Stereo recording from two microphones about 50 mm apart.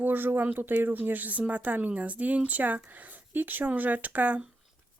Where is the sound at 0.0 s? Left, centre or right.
Right.